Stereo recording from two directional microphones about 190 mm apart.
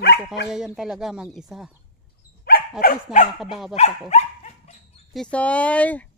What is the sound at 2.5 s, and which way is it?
Speech, 50° left (ahead or behind).